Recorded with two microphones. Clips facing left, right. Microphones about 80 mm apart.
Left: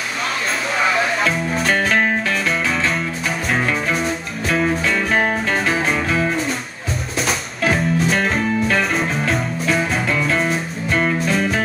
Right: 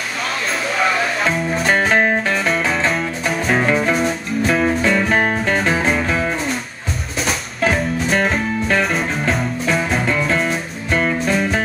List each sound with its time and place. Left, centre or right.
1.2 s music: centre
1.9 s music: centre
2.4 s music: centre
4.8 s music: centre
7.2 s music: centre